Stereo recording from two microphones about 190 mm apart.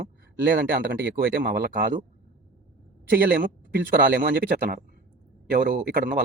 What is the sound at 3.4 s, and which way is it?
Speech, 60° right (ahead or behind).